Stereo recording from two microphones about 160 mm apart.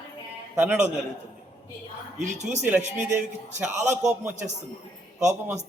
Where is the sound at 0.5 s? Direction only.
10° right (ahead or behind).